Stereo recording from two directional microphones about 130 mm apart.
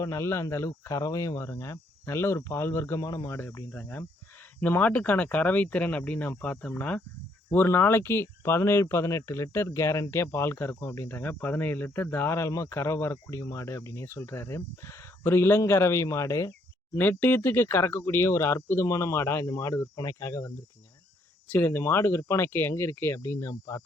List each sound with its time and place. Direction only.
0.0 s speech: 20° left (ahead or behind)